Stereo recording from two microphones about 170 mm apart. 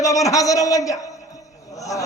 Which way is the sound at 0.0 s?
20° left (ahead or behind).